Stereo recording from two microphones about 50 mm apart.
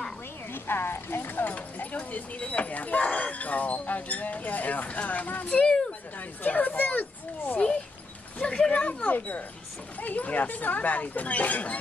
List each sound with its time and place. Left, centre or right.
0.5 s speech: left
7.5 s speech: left
8.4 s a sound: centre
8.7 s speech: left